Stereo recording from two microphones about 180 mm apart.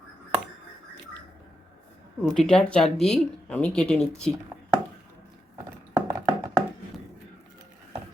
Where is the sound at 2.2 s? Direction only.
Centre (ahead or behind).